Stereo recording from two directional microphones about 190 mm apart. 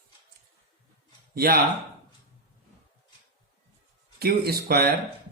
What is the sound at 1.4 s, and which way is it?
Speech, 55° right (ahead or behind).